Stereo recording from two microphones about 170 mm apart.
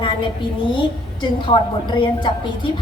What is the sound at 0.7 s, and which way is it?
A woman's voice, 30° left (ahead or behind).